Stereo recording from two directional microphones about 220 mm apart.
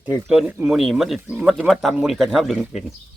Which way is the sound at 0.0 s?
10° right (ahead or behind).